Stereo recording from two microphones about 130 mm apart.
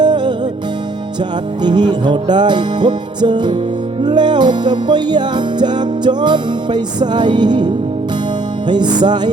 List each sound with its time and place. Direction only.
0.0 s music: 35° right (ahead or behind)
1.6 s music: 35° right (ahead or behind)